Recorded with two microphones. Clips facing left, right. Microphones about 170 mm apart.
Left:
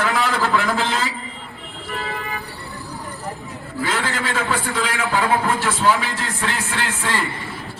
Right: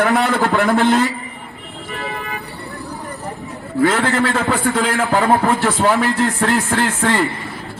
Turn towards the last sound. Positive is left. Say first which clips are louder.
# right 7 dB
turn(degrees=-60)  # may be behind; listen again after turning